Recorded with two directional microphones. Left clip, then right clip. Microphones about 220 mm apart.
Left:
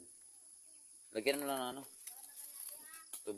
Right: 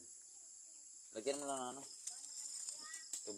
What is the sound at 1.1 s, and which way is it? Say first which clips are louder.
Speech: left 6 dB; 45° left (ahead or behind).